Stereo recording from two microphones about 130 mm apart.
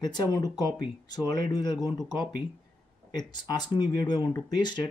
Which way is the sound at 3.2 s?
35° left (ahead or behind).